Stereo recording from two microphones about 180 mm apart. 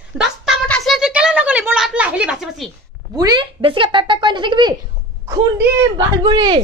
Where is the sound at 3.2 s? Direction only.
25° right (ahead or behind).